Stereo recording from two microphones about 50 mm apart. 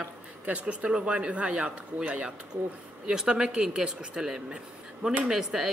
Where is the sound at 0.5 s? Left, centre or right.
Right.